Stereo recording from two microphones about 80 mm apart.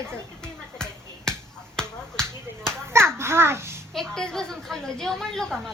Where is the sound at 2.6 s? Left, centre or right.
Right.